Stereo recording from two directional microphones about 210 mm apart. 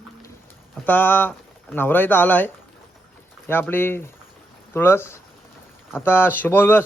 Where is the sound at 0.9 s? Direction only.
10° left (ahead or behind).